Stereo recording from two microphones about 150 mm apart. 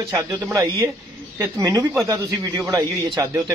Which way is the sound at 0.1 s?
25° right (ahead or behind).